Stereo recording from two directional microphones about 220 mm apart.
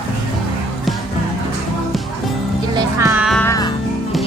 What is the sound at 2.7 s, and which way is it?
Music, 15° right (ahead or behind).